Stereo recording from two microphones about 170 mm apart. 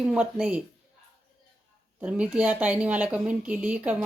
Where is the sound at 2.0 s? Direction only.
5° right (ahead or behind).